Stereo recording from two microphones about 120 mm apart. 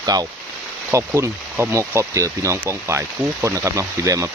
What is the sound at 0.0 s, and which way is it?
Speech, 35° right (ahead or behind).